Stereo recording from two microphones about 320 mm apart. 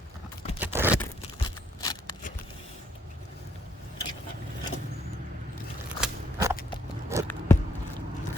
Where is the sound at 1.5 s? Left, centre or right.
Centre.